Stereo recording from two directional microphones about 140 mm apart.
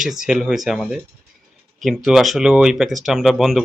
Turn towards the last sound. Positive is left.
turn(degrees=0)  # may be behind; listen again after turning